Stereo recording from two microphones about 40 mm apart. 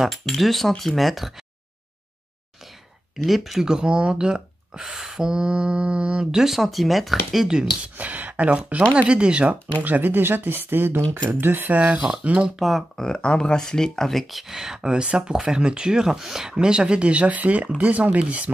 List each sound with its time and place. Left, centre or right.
0.1 s speech: centre
3.3 s speech: centre
3.6 s speech: right
6.3 s speech: centre
8.0 s speech: right
8.9 s speech: right
9.8 s speech: right
11.7 s speech: right
12.5 s speech: centre
12.9 s speech: centre
14.5 s speech: centre; by 18.5 s right